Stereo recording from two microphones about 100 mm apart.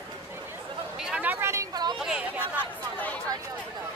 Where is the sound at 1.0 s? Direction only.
10° right (ahead or behind); by 1.7 s 25° right (ahead or behind).